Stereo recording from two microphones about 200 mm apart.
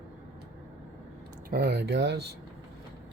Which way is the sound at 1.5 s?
50° right (ahead or behind).